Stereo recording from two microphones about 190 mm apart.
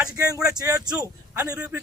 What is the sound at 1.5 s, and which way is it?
Speech, 5° right (ahead or behind).